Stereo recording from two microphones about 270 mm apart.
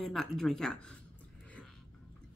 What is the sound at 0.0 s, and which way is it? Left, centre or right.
Speech, centre.